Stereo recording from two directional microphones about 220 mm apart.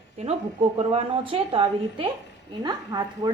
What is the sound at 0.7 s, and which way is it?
A woman's voice, 25° right (ahead or behind).